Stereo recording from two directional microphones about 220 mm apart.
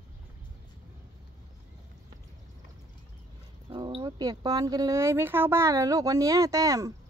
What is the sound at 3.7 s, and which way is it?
Speech, 25° right (ahead or behind).